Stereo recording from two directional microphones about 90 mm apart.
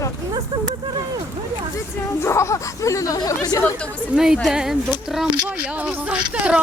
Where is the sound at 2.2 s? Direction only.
30° left (ahead or behind).